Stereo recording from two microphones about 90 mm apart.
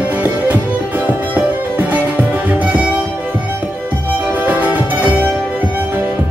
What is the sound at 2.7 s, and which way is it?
Music, 15° right (ahead or behind).